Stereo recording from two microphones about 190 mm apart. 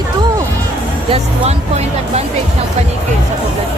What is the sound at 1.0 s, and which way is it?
Speech, 30° right (ahead or behind).